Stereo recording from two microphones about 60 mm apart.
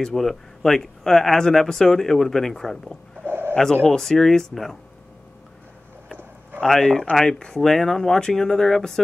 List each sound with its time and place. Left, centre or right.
0.0 s speech: centre
3.3 s bird: right
3.7 s speech: centre
6.6 s speech: centre